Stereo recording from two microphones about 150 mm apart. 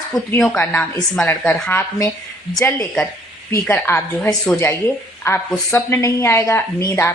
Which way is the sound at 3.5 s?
15° left (ahead or behind).